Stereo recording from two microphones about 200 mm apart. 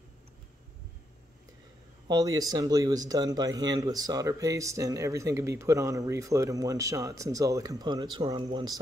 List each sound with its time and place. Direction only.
2.0 s speech: 20° right (ahead or behind)